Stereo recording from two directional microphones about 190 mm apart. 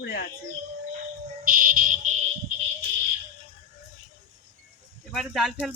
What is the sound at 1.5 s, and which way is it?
Fire alarm, 45° right (ahead or behind).